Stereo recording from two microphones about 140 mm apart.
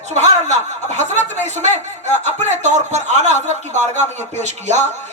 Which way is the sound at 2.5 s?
55° right (ahead or behind).